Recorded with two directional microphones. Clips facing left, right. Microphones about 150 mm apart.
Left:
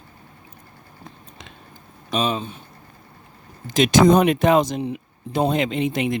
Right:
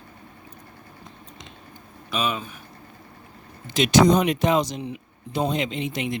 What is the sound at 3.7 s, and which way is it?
Speech, 45° left (ahead or behind).